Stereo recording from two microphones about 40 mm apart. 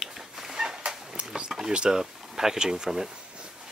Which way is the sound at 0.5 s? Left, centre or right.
Centre.